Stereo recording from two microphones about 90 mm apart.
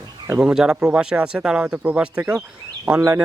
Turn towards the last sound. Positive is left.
turn(degrees=-20)  # may be behind; listen again after turning